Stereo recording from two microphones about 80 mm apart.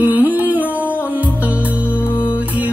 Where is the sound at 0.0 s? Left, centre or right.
Right.